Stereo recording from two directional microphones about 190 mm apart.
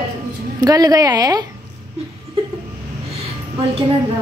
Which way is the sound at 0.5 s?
20° right (ahead or behind).